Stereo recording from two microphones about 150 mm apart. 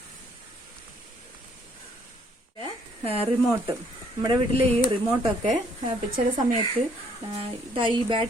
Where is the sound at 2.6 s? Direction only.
40° right (ahead or behind).